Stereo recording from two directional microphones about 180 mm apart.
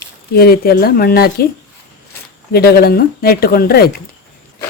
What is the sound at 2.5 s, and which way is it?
Speech, 60° left (ahead or behind).